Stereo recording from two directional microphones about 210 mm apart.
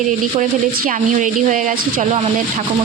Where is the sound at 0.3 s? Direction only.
40° right (ahead or behind).